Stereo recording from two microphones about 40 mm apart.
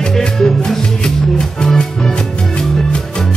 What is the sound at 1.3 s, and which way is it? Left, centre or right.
Music, centre.